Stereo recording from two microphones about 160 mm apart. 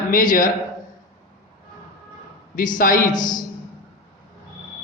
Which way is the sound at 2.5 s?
60° left (ahead or behind).